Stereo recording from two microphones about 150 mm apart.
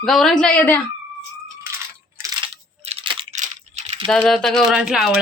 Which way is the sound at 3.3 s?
50° right (ahead or behind).